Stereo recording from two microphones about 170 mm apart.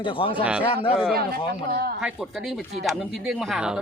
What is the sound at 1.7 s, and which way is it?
Speech, 65° right (ahead or behind).